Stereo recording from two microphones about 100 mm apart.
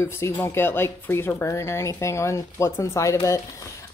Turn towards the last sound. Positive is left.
turn(degrees=35)  # may be behind; listen again after turning